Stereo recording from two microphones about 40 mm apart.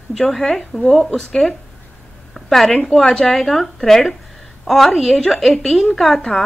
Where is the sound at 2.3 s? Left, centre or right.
Centre.